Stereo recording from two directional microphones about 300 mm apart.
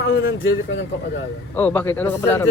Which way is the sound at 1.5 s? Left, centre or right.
Centre.